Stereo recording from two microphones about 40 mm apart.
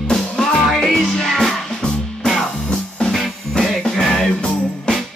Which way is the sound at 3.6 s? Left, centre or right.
Centre.